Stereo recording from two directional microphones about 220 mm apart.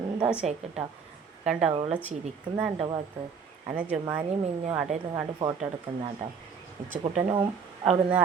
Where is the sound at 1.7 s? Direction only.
25° right (ahead or behind).